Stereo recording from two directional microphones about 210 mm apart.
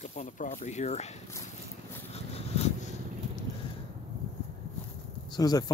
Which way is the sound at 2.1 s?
30° left (ahead or behind).